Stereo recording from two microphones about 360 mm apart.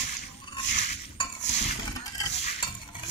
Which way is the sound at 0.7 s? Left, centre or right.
Centre.